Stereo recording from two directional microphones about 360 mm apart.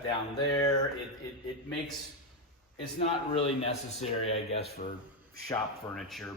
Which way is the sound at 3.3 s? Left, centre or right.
Centre.